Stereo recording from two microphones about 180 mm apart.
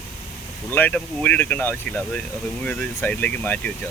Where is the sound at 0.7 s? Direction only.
10° left (ahead or behind).